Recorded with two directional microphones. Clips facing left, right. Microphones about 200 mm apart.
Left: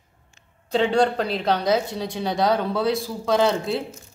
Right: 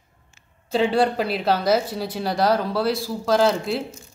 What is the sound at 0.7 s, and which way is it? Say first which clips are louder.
Speech: even; 5° right (ahead or behind).